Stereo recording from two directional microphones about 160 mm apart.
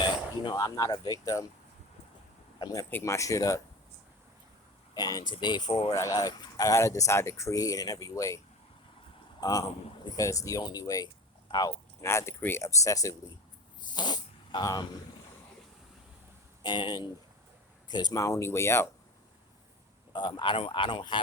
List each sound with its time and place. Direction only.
0.0 s speech: 25° left (ahead or behind)
2.6 s speech: 25° left (ahead or behind)
4.9 s speech: 25° left (ahead or behind)
5.9 s speech: 20° left (ahead or behind)
9.4 s speech: 20° left (ahead or behind)
12.0 s speech: 15° left (ahead or behind)
13.9 s fart: 25° left (ahead or behind)
16.6 s speech: 30° left (ahead or behind)
20.1 s speech: 30° left (ahead or behind)